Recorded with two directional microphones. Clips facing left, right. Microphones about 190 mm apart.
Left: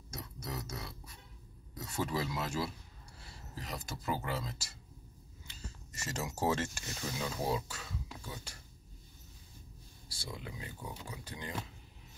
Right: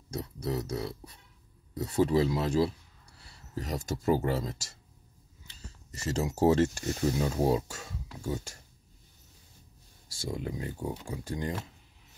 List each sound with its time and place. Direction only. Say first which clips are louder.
0.1 s speech: right 10 dB; 30° right (ahead or behind)
5.9 s speech: right 9 dB; 35° right (ahead or behind)
10.0 s speech: right 10 dB; 45° right (ahead or behind)